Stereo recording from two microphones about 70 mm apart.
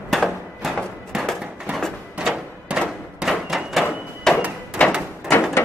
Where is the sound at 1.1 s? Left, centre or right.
Centre.